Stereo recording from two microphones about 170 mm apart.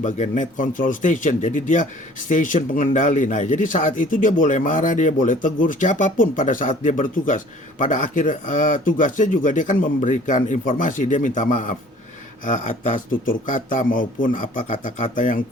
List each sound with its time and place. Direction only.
0.0 s speech: 45° left (ahead or behind)